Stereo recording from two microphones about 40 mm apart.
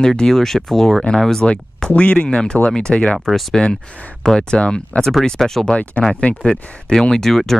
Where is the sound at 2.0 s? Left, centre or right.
Left.